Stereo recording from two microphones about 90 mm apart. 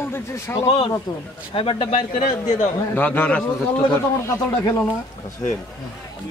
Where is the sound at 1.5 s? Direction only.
90° left.